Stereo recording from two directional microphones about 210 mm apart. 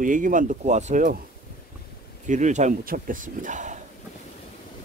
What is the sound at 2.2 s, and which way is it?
Speech, 35° right (ahead or behind).